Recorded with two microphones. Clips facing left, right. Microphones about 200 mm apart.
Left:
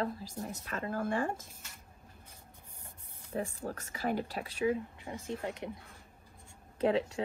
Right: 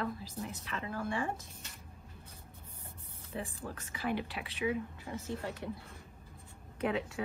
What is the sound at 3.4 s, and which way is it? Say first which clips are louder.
Speech: left 5 dB; 45° left (ahead or behind).